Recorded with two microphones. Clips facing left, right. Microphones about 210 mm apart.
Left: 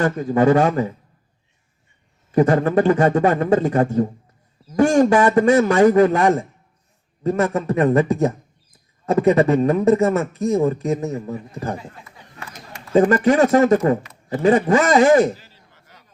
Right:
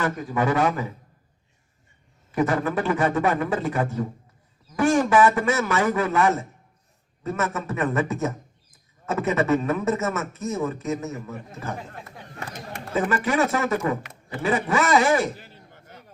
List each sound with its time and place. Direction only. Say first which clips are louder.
0.0 s speech: left 8 dB; 35° left (ahead or behind)
2.3 s speech: left 7 dB; 40° left (ahead or behind)
9.0 s speech: left 7 dB; 35° left (ahead or behind)
12.0 s a sound: right 2 dB; 60° right (ahead or behind)
13.0 s a man's voice: left 9 dB; 40° left (ahead or behind)
15.4 s a sound: right 5 dB; 55° right (ahead or behind)